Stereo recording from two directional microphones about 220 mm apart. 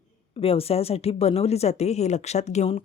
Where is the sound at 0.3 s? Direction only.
25° left (ahead or behind).